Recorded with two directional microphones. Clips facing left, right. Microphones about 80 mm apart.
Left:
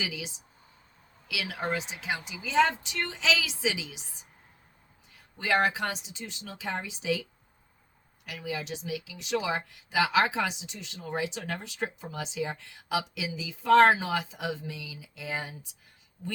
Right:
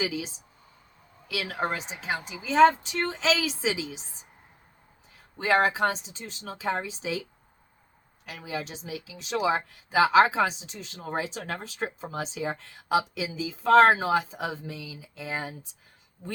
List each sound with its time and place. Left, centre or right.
0.0 s speech: right
5.4 s speech: right
8.3 s speech: right